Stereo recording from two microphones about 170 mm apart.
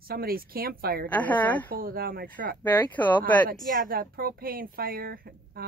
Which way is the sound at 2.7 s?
10° left (ahead or behind).